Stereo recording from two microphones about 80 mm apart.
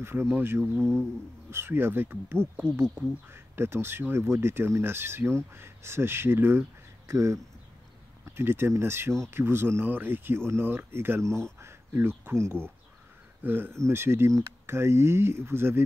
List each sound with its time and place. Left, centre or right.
0.0 s speech: right
0.6 s speech: centre
1.5 s speech: right